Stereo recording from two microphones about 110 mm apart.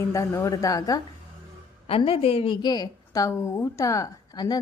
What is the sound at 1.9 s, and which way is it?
Speech, 60° left (ahead or behind).